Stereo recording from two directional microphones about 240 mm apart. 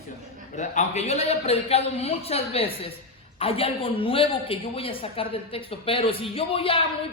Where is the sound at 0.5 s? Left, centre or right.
Left.